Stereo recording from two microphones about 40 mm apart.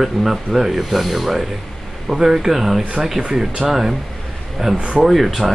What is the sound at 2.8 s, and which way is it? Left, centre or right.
Speech, right.